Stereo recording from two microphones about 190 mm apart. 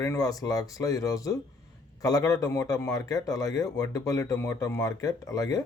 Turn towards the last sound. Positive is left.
turn(degrees=20)  # may be behind; listen again after turning